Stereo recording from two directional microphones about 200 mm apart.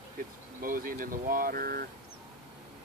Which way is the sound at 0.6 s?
45° right (ahead or behind).